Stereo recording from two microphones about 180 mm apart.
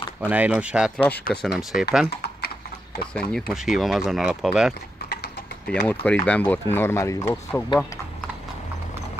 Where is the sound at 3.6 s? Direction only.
Centre (ahead or behind).